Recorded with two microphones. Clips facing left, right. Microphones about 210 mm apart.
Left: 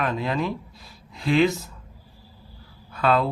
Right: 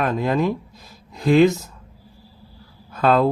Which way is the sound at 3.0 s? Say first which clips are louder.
Right 4 dB; 45° right (ahead or behind).